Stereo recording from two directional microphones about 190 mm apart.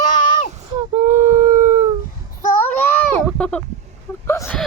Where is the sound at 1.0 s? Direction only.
40° right (ahead or behind).